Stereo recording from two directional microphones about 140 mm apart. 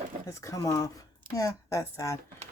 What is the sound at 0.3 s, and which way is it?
A woman's voice, 20° left (ahead or behind).